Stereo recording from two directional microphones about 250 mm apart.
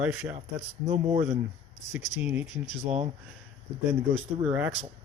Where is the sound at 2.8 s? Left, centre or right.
Right.